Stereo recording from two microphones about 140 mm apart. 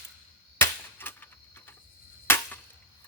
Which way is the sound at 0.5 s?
15° left (ahead or behind).